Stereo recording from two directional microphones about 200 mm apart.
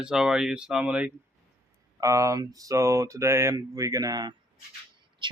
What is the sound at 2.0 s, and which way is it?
Speech, 15° right (ahead or behind).